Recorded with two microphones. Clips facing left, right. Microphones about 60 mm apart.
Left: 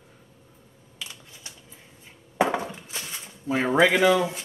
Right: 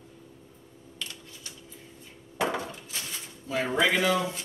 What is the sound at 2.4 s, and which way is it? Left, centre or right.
Chop, left.